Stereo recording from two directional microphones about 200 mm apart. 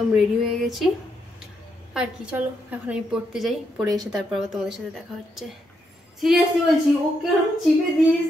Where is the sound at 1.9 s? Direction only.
5° right (ahead or behind).